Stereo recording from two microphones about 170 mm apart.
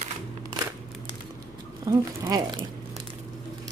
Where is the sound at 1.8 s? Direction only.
20° right (ahead or behind).